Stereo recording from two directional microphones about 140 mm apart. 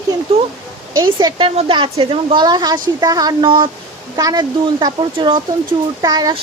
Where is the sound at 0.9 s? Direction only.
35° right (ahead or behind).